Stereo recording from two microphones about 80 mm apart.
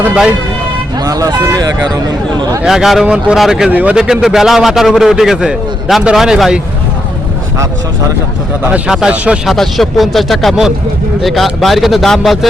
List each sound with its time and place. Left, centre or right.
1.0 s speech: right
2.6 s a man's voice: centre
3.7 s speech: right
3.9 s a man's voice: centre
8.9 s a man's voice: centre
9.5 s a man's voice: centre